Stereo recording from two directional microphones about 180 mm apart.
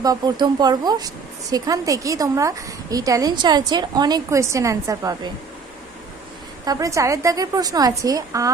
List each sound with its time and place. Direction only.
0.0 s speech: 20° right (ahead or behind)
6.7 s speech: 20° right (ahead or behind)